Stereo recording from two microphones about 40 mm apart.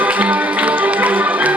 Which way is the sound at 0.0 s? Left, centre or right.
Right.